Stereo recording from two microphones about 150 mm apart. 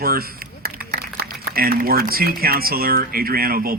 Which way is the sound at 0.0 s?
85° right.